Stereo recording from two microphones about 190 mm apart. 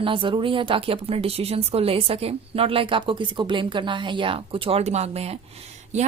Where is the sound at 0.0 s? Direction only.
25° right (ahead or behind).